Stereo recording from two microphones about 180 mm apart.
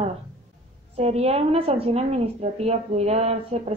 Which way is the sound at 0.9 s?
35° right (ahead or behind).